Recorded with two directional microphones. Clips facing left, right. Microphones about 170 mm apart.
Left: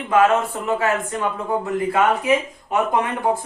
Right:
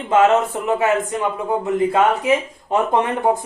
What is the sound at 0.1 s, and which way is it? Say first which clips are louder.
Speech: right 2 dB; 20° right (ahead or behind).